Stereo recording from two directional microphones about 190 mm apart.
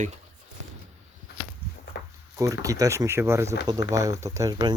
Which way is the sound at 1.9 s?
60° left (ahead or behind).